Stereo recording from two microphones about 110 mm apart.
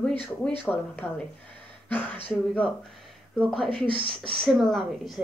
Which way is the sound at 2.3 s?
10° left (ahead or behind).